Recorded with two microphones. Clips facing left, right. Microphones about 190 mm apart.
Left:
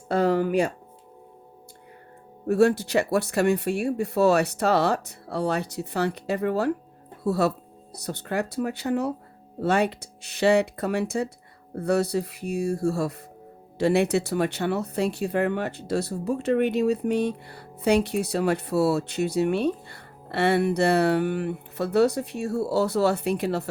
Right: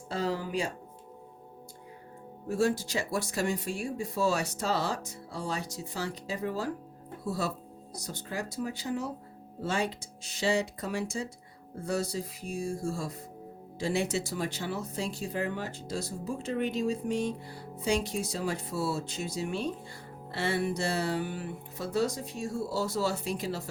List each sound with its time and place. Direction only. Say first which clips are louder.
0.1 s speech: left 10 dB; 60° left (ahead or behind)
2.5 s speech: left 8 dB; 65° left (ahead or behind)